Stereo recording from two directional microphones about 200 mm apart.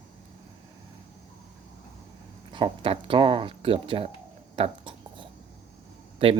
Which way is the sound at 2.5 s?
25° right (ahead or behind).